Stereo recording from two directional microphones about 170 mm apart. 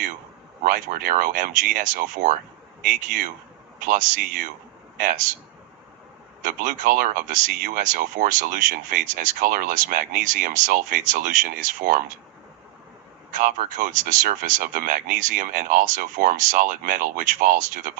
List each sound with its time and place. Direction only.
0.6 s a man's voice: 55° right (ahead or behind)
6.4 s speech: 50° right (ahead or behind)
13.3 s speech: 50° right (ahead or behind)